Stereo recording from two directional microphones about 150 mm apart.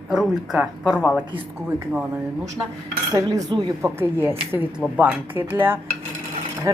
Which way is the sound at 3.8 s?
15° right (ahead or behind).